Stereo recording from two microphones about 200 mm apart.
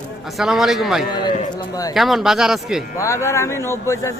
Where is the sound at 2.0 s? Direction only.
Centre (ahead or behind).